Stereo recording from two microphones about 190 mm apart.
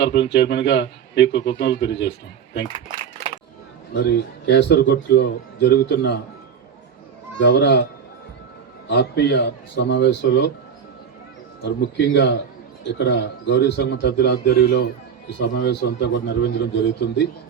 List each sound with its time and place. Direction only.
0.0 s speech: 65° left (ahead or behind)
3.9 s speech: 65° left (ahead or behind)
7.3 s speech: 65° left (ahead or behind)
8.9 s speech: 60° left (ahead or behind)
11.6 s speech: 65° left (ahead or behind)